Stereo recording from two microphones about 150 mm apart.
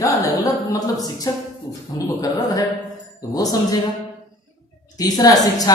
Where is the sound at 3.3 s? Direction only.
25° left (ahead or behind).